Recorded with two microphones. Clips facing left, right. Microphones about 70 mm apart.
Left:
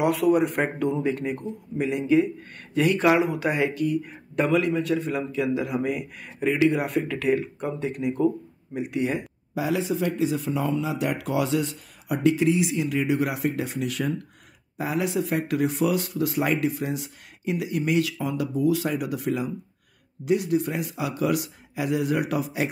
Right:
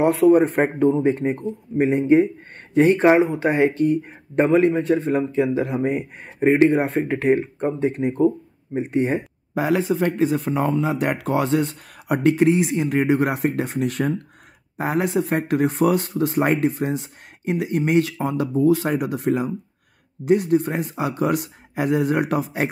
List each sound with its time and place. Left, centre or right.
0.0 s speech: right
9.6 s speech: right